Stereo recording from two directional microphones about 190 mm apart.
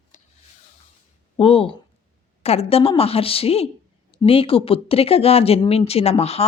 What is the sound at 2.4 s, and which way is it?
Speech, 30° left (ahead or behind).